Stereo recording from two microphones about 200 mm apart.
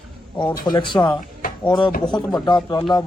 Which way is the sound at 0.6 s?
20° left (ahead or behind).